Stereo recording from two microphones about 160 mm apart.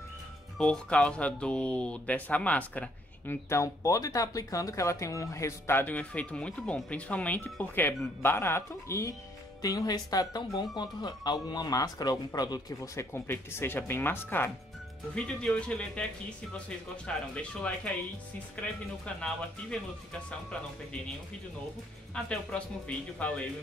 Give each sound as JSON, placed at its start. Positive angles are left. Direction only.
{"t": 0.6, "sound": "speech", "side_deg": 5}
{"t": 19.0, "sound": "speech", "side_deg": 5}
{"t": 22.1, "sound": "speech", "side_deg": 5}